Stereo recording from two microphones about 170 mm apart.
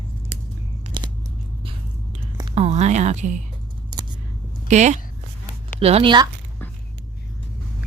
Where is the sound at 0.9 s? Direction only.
30° right (ahead or behind).